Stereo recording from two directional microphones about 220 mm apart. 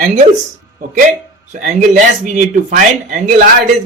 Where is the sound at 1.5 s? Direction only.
35° right (ahead or behind).